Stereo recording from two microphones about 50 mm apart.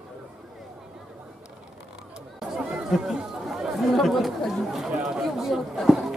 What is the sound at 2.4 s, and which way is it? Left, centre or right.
Chatter, centre.